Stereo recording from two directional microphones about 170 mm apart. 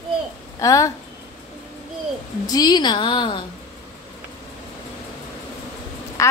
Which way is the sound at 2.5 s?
25° left (ahead or behind).